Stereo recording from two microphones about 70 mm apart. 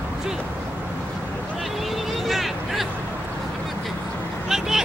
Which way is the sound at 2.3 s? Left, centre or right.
Centre.